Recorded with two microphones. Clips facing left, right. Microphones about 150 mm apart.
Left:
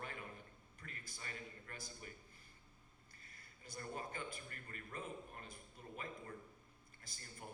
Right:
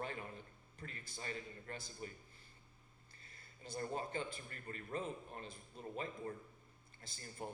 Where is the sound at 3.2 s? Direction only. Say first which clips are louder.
Right 4 dB; 30° right (ahead or behind).